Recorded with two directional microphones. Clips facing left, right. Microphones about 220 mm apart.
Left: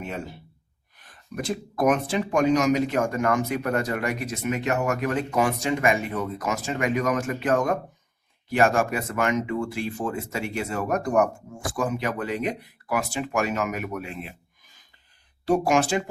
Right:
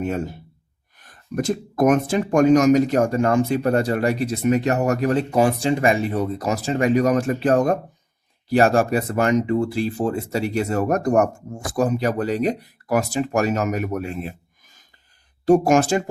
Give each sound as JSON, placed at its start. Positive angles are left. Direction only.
{"t": 0.0, "sound": "speech", "side_deg": -45}